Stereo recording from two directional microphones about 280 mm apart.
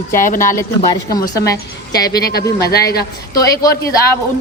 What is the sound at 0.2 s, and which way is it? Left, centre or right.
Speech, left.